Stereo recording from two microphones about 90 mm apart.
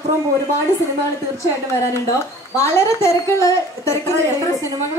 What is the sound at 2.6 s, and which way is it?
A woman's voice, 30° left (ahead or behind).